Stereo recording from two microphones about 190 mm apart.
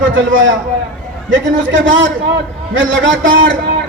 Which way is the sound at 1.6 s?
80° right.